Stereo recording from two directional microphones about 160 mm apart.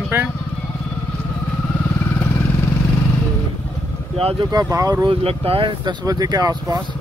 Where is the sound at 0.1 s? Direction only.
15° right (ahead or behind).